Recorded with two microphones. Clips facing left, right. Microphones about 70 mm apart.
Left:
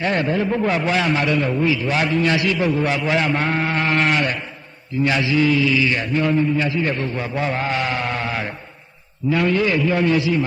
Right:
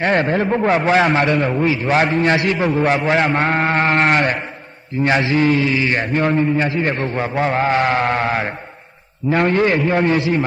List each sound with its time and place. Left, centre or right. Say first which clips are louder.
0.3 s a man's voice: right 2 dB; right
0.5 s a man's voice: right 8 dB; right